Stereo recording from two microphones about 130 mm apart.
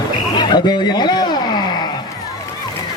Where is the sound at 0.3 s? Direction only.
35° left (ahead or behind).